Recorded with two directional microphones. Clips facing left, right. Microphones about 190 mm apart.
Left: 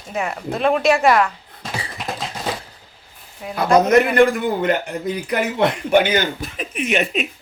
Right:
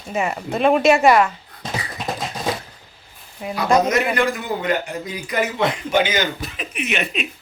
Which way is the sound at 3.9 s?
55° left (ahead or behind).